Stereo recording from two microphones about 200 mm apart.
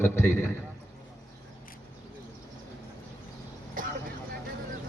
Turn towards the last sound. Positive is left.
turn(degrees=-40)  # may be behind; listen again after turning